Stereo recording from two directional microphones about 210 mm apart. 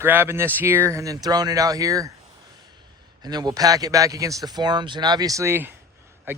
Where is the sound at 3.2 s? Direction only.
20° right (ahead or behind).